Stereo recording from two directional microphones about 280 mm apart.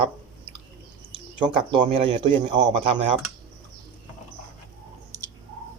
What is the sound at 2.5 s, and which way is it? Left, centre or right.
Speech, centre.